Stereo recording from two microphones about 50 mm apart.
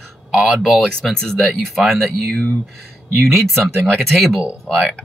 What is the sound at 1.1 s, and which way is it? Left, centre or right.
Speech, centre.